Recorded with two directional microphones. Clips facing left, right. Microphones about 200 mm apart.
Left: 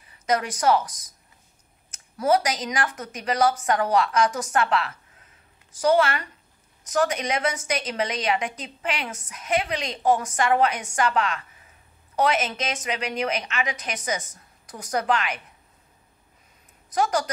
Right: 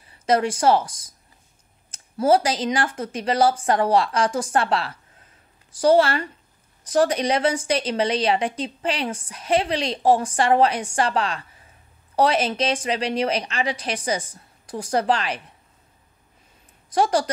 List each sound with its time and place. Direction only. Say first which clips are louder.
0.0 s a woman's voice: right 5 dB; 30° right (ahead or behind)
16.9 s a woman's voice: right 3 dB; 30° right (ahead or behind)